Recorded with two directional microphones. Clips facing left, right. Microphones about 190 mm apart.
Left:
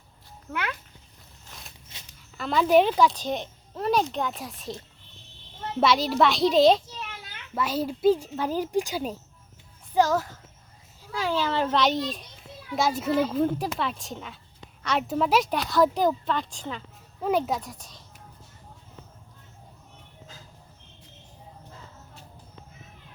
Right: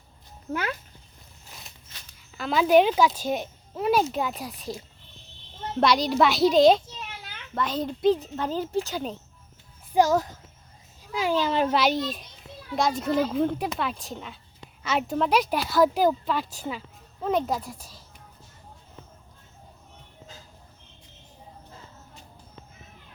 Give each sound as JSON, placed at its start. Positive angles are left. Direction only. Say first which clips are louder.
{"t": 2.4, "sound": "a child's voice", "louder": "right 1 dB", "side_deg": 0}
{"t": 9.9, "sound": "a child's voice", "louder": "right 2 dB", "side_deg": -10}
{"t": 11.8, "sound": "a child's voice", "louder": "even", "side_deg": -5}
{"t": 17.2, "sound": "a child's voice", "louder": "even", "side_deg": 5}